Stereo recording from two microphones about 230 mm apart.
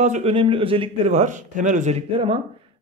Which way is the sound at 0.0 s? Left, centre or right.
Right.